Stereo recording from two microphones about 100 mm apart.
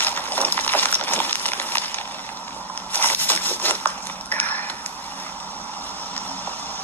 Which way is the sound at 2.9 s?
20° left (ahead or behind).